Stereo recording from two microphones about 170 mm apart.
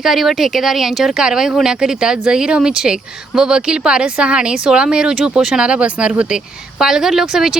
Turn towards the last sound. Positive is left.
turn(degrees=-5)  # may be behind; listen again after turning